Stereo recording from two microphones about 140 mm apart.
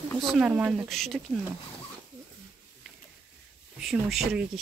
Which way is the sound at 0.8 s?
Centre (ahead or behind).